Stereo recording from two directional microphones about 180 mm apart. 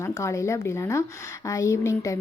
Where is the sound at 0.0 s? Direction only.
15° left (ahead or behind).